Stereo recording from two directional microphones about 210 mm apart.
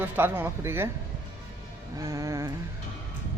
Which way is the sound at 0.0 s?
10° right (ahead or behind).